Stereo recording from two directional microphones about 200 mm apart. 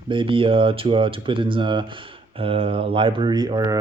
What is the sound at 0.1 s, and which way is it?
Speech, 25° right (ahead or behind).